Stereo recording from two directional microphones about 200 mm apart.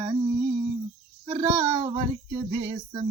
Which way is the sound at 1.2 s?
20° right (ahead or behind).